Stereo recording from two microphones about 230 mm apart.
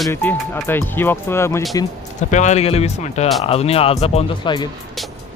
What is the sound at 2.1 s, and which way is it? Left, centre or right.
Speech, left.